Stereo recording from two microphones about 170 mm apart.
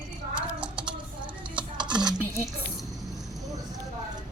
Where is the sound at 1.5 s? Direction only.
25° right (ahead or behind).